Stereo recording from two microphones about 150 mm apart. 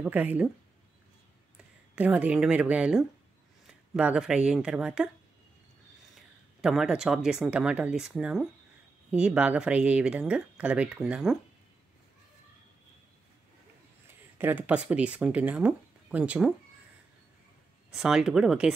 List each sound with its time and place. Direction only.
0.0 s speech: 10° right (ahead or behind)
2.0 s speech: 10° right (ahead or behind)
6.1 s a sound: centre (ahead or behind)
7.2 s speech: 5° right (ahead or behind)
14.4 s speech: 10° right (ahead or behind)
17.9 s speech: 5° right (ahead or behind)